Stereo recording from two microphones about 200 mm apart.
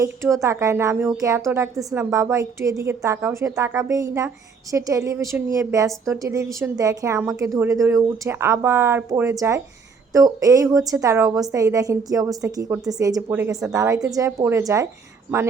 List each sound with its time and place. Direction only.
0.0 s a woman's voice: 15° right (ahead or behind)